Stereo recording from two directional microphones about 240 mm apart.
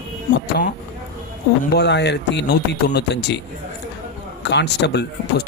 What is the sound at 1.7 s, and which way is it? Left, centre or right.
Mantra, left.